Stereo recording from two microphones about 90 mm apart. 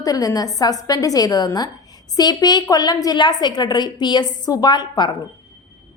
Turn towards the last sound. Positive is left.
turn(degrees=55)  # may be behind; listen again after turning